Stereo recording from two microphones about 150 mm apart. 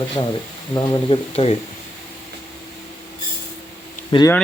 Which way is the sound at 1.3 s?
40° left (ahead or behind).